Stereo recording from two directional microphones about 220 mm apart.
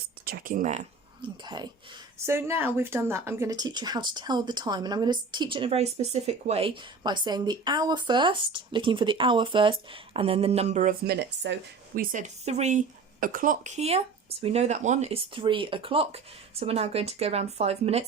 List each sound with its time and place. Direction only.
0.3 s speech: 40° right (ahead or behind)
1.2 s speech: 20° right (ahead or behind); by 11.5 s 50° right (ahead or behind)
11.9 s speech: 35° right (ahead or behind)